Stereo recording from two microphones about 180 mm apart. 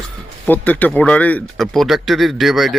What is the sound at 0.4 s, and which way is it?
Speech, 10° left (ahead or behind).